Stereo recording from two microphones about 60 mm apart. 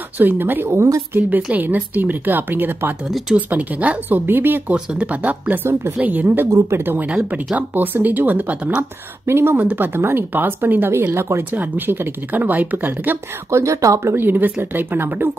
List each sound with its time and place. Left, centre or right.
0.2 s a woman's voice: right
0.7 s speech: right
1.1 s a woman's voice: right
4.7 s a woman's voice: right
9.2 s speech: right
9.6 s a woman's voice: right
11.5 s a woman's voice: right
13.5 s speech: right
14.1 s a woman's voice: right